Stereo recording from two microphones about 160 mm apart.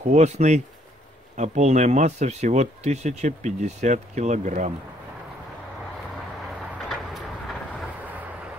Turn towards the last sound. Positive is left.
turn(degrees=0)  # may be behind; listen again after turning